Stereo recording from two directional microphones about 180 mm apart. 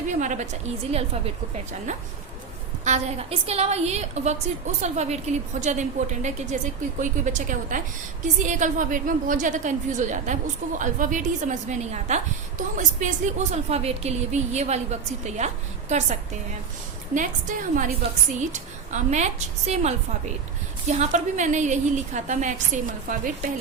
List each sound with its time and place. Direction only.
0.2 s a woman's voice: 45° right (ahead or behind)
17.7 s a woman's voice: 45° right (ahead or behind)